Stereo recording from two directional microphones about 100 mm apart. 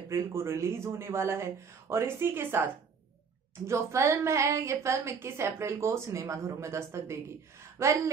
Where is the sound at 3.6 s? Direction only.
30° right (ahead or behind).